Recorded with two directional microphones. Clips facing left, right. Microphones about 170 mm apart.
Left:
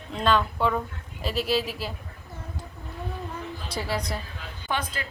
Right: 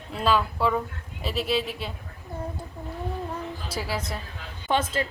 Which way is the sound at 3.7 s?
5° right (ahead or behind).